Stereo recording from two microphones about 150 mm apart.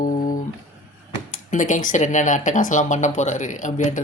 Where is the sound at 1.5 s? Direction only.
60° left (ahead or behind).